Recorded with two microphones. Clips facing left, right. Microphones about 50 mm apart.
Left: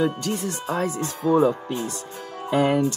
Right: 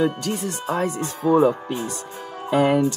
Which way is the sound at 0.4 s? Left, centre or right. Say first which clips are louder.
Right 3 dB; centre.